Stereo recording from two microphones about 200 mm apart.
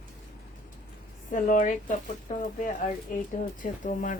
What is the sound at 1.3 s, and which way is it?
Speech, 40° left (ahead or behind).